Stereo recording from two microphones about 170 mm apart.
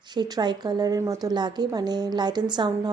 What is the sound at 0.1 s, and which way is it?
Speech, 25° right (ahead or behind).